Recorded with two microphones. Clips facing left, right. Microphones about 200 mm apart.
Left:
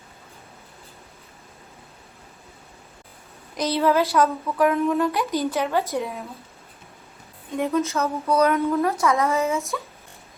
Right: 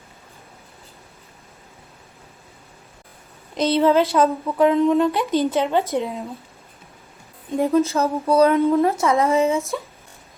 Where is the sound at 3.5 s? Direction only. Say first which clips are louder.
Right 4 dB; 25° right (ahead or behind).